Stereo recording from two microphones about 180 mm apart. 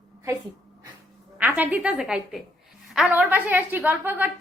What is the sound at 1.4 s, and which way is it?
A woman's voice, 10° right (ahead or behind).